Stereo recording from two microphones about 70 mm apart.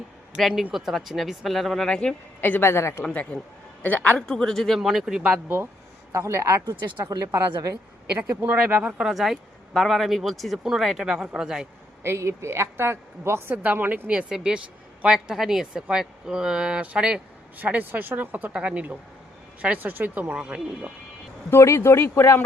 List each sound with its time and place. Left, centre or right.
0.3 s speech: centre
2.4 s speech: left
3.1 s a man's voice: centre
4.3 s speech: centre
6.1 s speech: right
8.4 s speech: centre
9.1 s speech: centre
12.0 s a woman's voice: right
14.1 s speech: centre
21.5 s speech: left